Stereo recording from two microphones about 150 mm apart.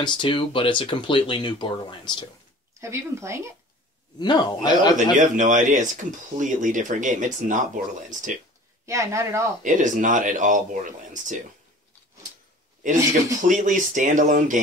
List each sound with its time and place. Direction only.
0.0 s speech: 35° left (ahead or behind)
2.8 s speech: 20° right (ahead or behind)
4.2 s a man's voice: 30° left (ahead or behind)
5.2 s speech: 55° right (ahead or behind)
8.8 s speech: 20° right (ahead or behind)
9.6 s speech: 60° right (ahead or behind)
13.4 s speech: 55° right (ahead or behind)